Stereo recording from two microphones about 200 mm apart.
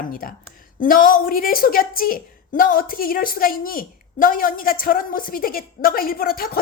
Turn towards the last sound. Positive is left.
turn(degrees=50)  # may be behind; listen again after turning